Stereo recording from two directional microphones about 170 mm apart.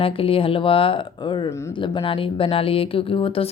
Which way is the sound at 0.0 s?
35° left (ahead or behind).